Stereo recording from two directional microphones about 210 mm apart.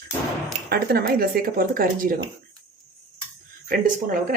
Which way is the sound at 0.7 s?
45° right (ahead or behind).